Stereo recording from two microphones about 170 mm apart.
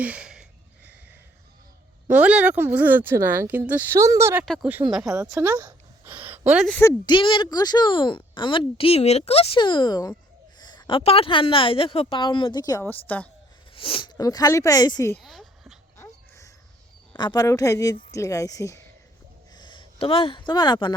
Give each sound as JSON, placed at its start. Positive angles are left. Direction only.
{"t": 0.0, "sound": "a sound", "side_deg": -5}
{"t": 2.0, "sound": "speech", "side_deg": -10}
{"t": 4.4, "sound": "speech", "side_deg": 5}
{"t": 5.1, "sound": "speech", "side_deg": -20}
{"t": 6.1, "sound": "a sound", "side_deg": -10}
{"t": 6.7, "sound": "speech", "side_deg": 10}
{"t": 7.0, "sound": "a woman's voice", "side_deg": 30}
{"t": 13.7, "sound": "a woman's voice", "side_deg": 30}
{"t": 15.2, "sound": "a sound", "side_deg": 0}
{"t": 17.2, "sound": "a woman's voice", "side_deg": 25}